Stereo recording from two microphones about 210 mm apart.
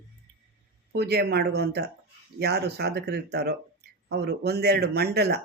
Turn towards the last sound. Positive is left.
turn(degrees=-50)  # may be behind; listen again after turning